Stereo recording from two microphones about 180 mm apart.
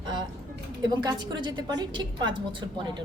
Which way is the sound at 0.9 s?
25° right (ahead or behind).